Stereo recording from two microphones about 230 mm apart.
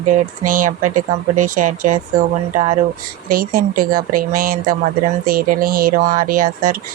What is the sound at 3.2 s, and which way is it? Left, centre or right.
Speech, right.